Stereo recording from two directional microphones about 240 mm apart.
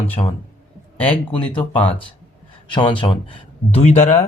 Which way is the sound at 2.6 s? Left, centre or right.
Centre.